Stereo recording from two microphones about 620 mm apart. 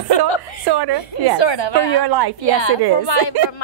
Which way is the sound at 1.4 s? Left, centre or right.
Left.